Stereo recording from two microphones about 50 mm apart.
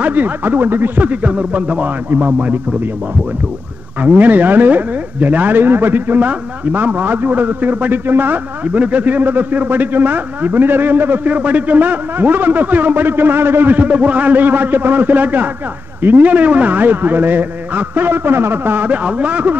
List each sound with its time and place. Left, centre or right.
0.0 s a man's voice: right
4.0 s a man's voice: right
8.7 s a man's voice: right
18.9 s a man's voice: right